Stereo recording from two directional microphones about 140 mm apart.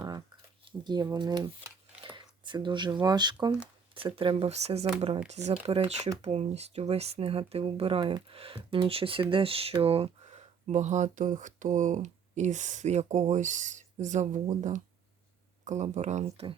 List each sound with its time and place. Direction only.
0.6 s speech: 35° right (ahead or behind); by 16.5 s 55° right (ahead or behind)